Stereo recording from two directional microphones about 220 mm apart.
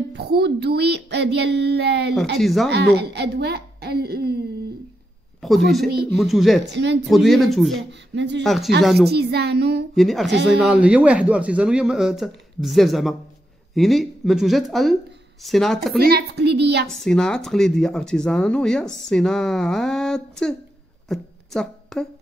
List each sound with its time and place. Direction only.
0.1 s speech: 50° right (ahead or behind)
2.3 s speech: centre (ahead or behind)
2.7 s a child's voice: 50° right (ahead or behind)
5.7 s speech: centre (ahead or behind)
6.7 s speech: 50° right (ahead or behind)
7.1 s speech: centre (ahead or behind)
8.1 s speech: 55° right (ahead or behind)
9.9 s speech: centre (ahead or behind)
16.0 s a woman's voice: 45° right (ahead or behind)
16.8 s speech: 5° left (ahead or behind)
21.1 s a sound: centre (ahead or behind)